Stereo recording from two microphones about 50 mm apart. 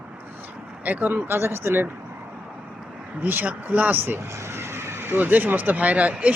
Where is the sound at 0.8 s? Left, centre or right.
Right.